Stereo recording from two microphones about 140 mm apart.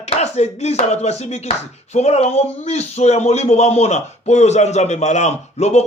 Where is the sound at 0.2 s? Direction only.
50° left (ahead or behind).